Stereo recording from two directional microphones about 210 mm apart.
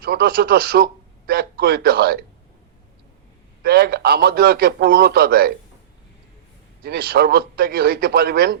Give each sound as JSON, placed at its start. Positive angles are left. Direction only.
{"t": 0.0, "sound": "a man's voice", "side_deg": -50}
{"t": 3.6, "sound": "a man's voice", "side_deg": -45}
{"t": 6.8, "sound": "a man's voice", "side_deg": -50}